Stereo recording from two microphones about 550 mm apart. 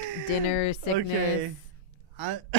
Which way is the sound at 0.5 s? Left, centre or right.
Left.